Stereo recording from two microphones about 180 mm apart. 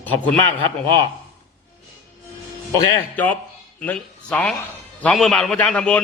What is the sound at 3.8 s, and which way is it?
A man's voice, 5° left (ahead or behind).